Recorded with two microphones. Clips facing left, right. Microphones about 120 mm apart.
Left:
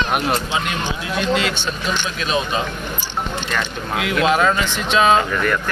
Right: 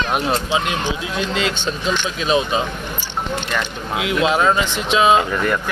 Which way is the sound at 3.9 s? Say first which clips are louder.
Even; 15° right (ahead or behind).